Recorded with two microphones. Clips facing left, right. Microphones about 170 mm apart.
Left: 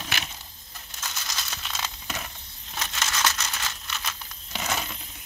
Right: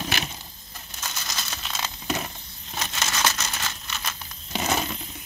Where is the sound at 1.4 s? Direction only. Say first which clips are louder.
Right 2 dB; 5° right (ahead or behind).